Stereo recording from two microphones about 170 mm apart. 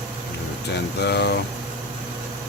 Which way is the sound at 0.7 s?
85° left.